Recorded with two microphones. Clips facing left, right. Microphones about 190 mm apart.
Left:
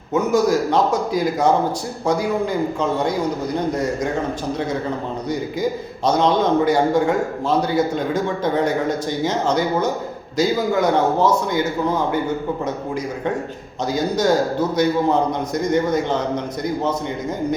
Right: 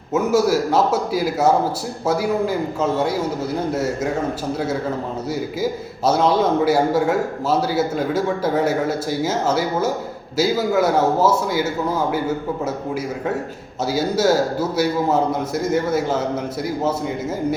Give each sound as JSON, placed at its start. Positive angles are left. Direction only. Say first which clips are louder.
{"t": 0.1, "sound": "a man's voice", "louder": "even", "side_deg": -5}